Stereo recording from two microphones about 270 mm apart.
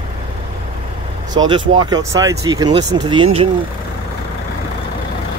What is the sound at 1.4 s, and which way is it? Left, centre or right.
Speech, centre.